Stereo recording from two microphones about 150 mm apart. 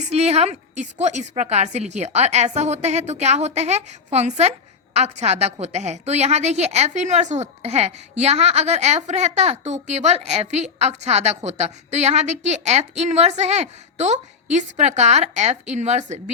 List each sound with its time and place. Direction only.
0.1 s a woman's voice: 45° right (ahead or behind)